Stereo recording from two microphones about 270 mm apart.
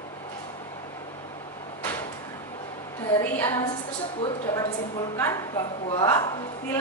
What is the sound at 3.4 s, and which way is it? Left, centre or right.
A woman's voice, centre.